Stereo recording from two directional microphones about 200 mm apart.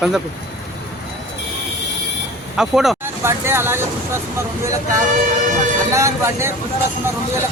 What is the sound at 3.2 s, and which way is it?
Speech, 10° right (ahead or behind).